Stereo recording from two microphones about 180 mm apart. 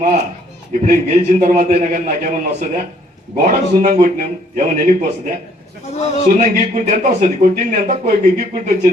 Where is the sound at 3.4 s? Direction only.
50° right (ahead or behind).